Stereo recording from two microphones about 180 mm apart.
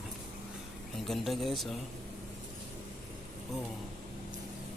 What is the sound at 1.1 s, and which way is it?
Speech, centre (ahead or behind).